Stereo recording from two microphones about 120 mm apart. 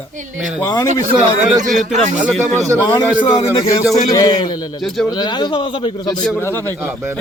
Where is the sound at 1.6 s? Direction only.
90° right.